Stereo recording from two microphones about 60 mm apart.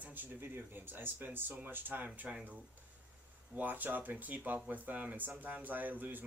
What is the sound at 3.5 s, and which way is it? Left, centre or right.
Speech, right.